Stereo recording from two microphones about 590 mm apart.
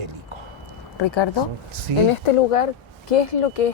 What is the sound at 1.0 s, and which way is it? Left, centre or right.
Speech, left.